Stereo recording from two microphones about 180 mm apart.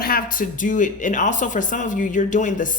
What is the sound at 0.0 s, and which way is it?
Speech, 55° left (ahead or behind).